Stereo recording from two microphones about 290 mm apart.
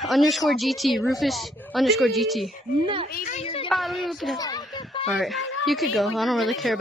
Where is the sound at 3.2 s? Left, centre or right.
Left.